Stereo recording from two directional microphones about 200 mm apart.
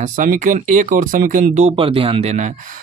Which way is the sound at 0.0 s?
40° right (ahead or behind).